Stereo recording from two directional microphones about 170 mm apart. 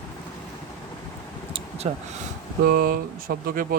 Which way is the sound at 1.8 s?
40° right (ahead or behind).